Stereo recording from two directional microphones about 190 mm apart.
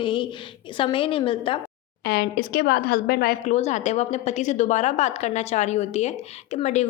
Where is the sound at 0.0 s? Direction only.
25° left (ahead or behind).